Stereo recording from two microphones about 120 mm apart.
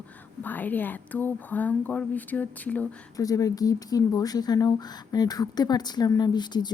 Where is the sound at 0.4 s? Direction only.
15° left (ahead or behind).